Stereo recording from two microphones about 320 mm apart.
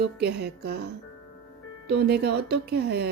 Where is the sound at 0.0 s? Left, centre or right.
Right.